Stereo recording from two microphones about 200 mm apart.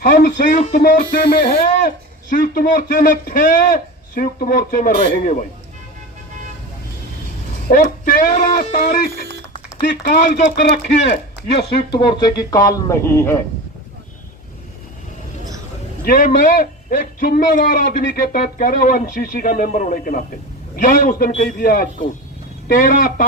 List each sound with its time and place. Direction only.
0.0 s a man's voice: 40° left (ahead or behind)
2.3 s a man's voice: 45° left (ahead or behind)
7.7 s a man's voice: 45° left (ahead or behind)
11.7 s speech: 25° left (ahead or behind)
16.0 s a man's voice: 45° left (ahead or behind)